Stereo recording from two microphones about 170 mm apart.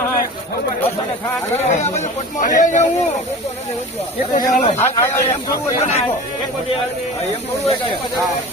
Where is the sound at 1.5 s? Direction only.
40° left (ahead or behind).